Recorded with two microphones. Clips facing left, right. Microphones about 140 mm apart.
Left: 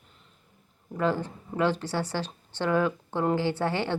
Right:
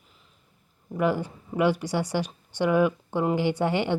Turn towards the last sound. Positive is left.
turn(degrees=-15)  # may be behind; listen again after turning